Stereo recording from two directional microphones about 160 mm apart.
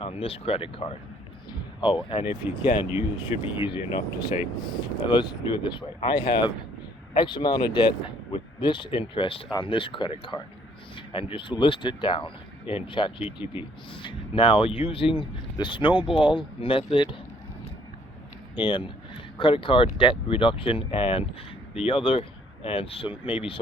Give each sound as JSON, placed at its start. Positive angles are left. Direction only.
{"t": 0.0, "sound": "speech", "side_deg": 35}
{"t": 18.5, "sound": "speech", "side_deg": 30}